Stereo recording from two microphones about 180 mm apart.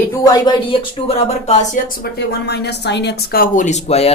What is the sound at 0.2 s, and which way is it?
Speech, 25° left (ahead or behind).